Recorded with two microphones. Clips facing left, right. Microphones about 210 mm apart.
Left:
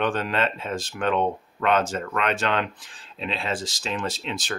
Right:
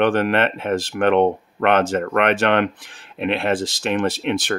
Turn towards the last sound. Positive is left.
turn(degrees=-60)  # may be behind; listen again after turning